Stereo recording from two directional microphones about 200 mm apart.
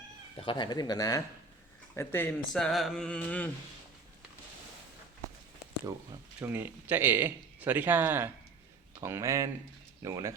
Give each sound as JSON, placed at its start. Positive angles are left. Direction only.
{"t": 0.3, "sound": "speech", "side_deg": 25}
{"t": 5.8, "sound": "speech", "side_deg": -15}